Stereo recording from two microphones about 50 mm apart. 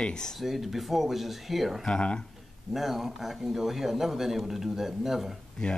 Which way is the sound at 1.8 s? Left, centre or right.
Centre.